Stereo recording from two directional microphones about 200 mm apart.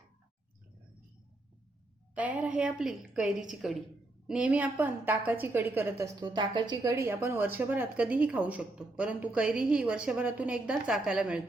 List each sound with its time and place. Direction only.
2.1 s a woman's voice: 5° right (ahead or behind)
6.1 s speech: 20° right (ahead or behind); by 11.4 s 5° right (ahead or behind)